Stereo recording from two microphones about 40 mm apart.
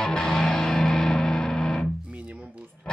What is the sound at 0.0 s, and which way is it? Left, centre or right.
Music, centre.